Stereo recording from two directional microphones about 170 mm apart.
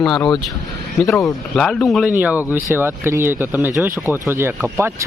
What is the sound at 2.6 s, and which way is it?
Speech, 10° right (ahead or behind).